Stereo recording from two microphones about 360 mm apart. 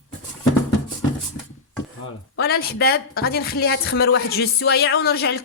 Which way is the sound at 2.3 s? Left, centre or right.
Left.